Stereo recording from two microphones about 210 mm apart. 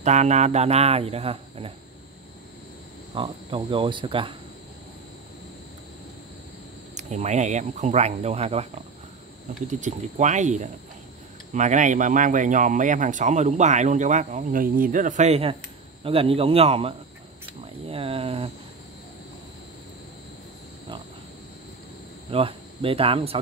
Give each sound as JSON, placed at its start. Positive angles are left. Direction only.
{"t": 0.0, "sound": "speech", "side_deg": -35}
{"t": 3.2, "sound": "speech", "side_deg": -25}
{"t": 7.0, "sound": "speech", "side_deg": -35}
{"t": 17.8, "sound": "a sound", "side_deg": -25}
{"t": 22.3, "sound": "speech", "side_deg": -25}